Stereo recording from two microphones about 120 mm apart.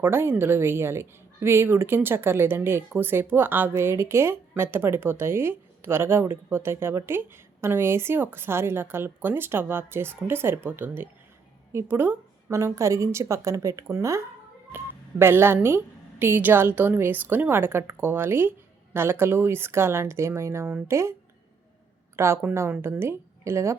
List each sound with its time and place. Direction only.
0.0 s a woman's voice: 20° right (ahead or behind)